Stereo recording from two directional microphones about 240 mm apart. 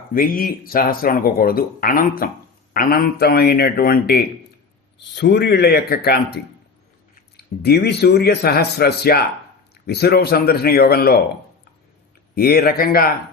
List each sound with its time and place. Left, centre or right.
0.1 s speech: left
7.6 s speech: left
12.3 s speech: left